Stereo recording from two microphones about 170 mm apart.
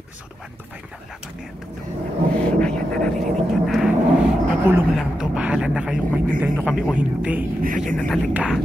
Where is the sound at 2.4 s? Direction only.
5° left (ahead or behind).